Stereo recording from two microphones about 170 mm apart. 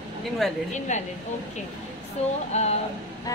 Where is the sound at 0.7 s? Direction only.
45° left (ahead or behind).